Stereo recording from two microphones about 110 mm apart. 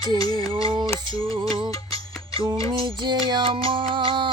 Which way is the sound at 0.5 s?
50° right (ahead or behind).